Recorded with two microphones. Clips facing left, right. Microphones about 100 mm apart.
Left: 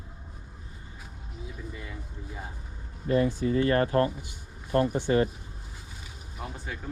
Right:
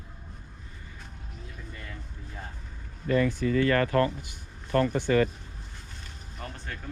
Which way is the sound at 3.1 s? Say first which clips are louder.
Even; 20° left (ahead or behind).